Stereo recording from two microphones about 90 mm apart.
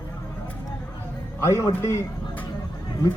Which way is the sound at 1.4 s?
30° left (ahead or behind).